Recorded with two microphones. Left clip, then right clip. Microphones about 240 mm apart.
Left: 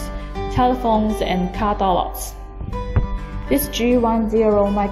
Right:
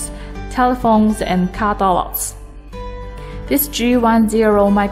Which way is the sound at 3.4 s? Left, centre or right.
Right.